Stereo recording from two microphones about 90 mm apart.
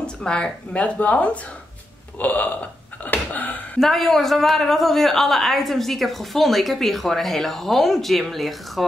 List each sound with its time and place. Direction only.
0.0 s speech: 10° left (ahead or behind)
3.8 s a woman's voice: 5° left (ahead or behind)